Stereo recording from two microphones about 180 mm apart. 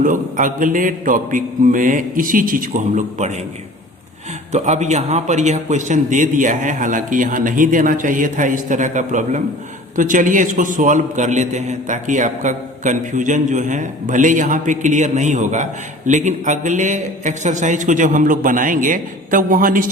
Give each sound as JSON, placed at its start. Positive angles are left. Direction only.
{"t": 0.0, "sound": "a man's voice", "side_deg": -45}
{"t": 4.5, "sound": "a man's voice", "side_deg": -40}